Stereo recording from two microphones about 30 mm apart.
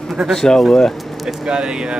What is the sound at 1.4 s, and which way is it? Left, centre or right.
Speech, right.